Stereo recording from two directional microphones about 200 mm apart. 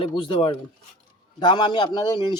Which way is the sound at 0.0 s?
25° left (ahead or behind).